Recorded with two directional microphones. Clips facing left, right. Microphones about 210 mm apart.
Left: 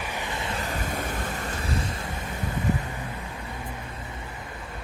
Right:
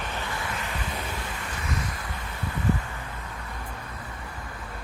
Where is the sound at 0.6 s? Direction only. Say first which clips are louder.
Left 3 dB; 40° left (ahead or behind).